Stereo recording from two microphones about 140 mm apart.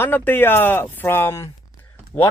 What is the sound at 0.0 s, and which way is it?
Speech, 15° left (ahead or behind).